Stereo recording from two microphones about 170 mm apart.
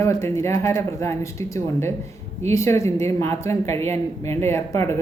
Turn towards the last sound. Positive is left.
turn(degrees=15)  # may be behind; listen again after turning